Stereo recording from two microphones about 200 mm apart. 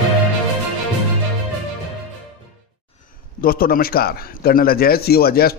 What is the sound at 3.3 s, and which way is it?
A man's voice, 45° left (ahead or behind).